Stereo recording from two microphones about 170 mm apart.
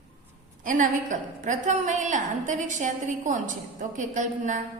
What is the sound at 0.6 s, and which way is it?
A woman's voice, 50° right (ahead or behind).